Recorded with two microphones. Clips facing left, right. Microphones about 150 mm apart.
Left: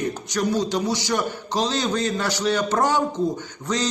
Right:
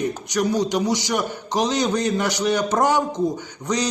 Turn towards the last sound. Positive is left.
turn(degrees=-15)  # may be behind; listen again after turning